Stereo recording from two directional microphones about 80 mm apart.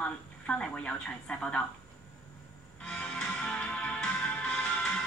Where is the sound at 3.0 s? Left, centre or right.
Centre.